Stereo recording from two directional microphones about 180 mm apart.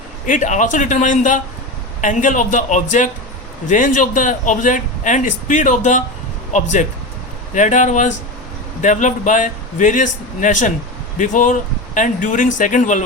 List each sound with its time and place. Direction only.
0.3 s a man's voice: 45° left (ahead or behind)